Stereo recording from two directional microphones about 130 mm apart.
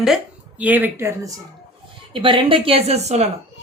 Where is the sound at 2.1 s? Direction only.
40° right (ahead or behind); by 3.2 s 55° right (ahead or behind).